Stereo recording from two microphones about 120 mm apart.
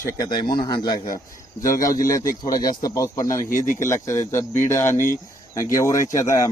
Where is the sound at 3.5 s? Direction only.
90° left.